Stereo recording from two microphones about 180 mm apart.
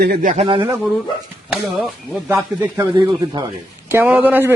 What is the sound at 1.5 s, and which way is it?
Speech, 10° right (ahead or behind).